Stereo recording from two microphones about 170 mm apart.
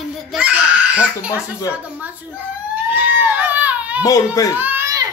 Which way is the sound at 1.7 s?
10° right (ahead or behind).